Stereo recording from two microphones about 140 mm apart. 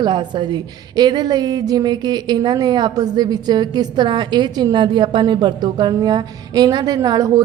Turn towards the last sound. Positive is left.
turn(degrees=-25)  # may be behind; listen again after turning